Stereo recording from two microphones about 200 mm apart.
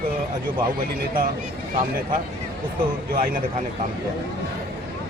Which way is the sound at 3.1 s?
45° right (ahead or behind).